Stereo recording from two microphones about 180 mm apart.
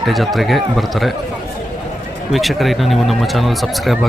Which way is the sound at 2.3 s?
Centre (ahead or behind).